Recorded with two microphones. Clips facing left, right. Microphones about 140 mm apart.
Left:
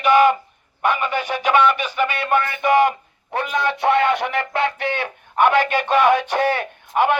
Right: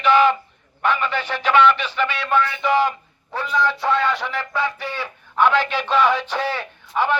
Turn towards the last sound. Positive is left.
turn(degrees=55)  # may be behind; listen again after turning